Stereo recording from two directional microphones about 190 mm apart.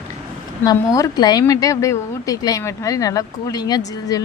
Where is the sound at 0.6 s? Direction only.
20° left (ahead or behind).